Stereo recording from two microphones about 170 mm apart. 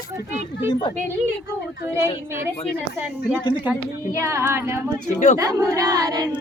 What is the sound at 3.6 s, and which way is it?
A woman's voice, 15° right (ahead or behind).